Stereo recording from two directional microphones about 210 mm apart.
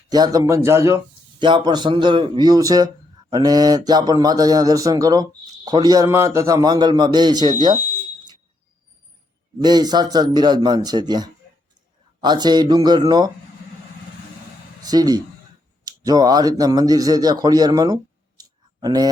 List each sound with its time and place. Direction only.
0.1 s a man's voice: 20° right (ahead or behind)
9.6 s a man's voice: 20° right (ahead or behind)
14.8 s a man's voice: 20° right (ahead or behind)